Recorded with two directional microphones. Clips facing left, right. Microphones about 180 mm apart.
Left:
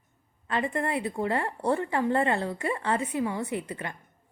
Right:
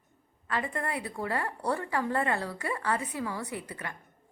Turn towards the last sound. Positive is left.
turn(degrees=25)  # may be behind; listen again after turning